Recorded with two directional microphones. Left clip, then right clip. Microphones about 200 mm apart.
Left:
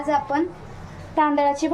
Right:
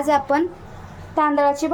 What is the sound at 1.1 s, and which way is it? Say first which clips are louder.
Speech: right 2 dB; 20° right (ahead or behind).